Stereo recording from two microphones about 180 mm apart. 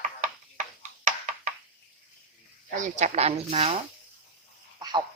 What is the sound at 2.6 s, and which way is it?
Speech, 40° right (ahead or behind).